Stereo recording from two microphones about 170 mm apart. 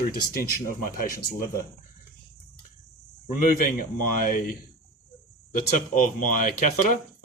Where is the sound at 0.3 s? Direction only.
60° left (ahead or behind).